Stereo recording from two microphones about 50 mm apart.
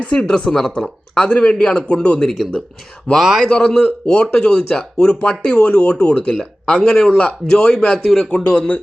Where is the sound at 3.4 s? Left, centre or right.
Left.